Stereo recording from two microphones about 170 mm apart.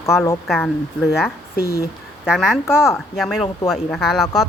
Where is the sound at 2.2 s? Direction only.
5° right (ahead or behind).